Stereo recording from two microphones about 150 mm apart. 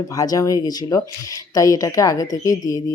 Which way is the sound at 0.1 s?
25° left (ahead or behind).